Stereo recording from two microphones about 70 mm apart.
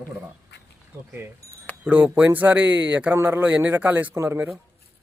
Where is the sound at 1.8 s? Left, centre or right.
Right.